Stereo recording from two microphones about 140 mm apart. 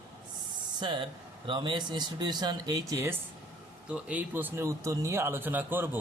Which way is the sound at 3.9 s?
10° right (ahead or behind).